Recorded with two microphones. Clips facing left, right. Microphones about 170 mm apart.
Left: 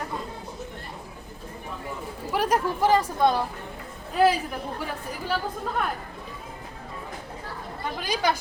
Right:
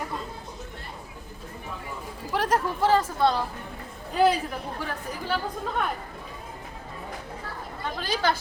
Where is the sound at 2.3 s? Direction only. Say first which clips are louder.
Left 1 dB; 10° left (ahead or behind).